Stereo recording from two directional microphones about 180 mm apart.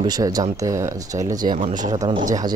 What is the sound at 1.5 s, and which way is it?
Speech, 40° right (ahead or behind).